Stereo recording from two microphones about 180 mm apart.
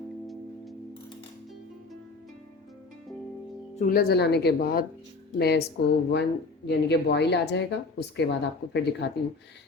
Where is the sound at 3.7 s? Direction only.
55° left (ahead or behind).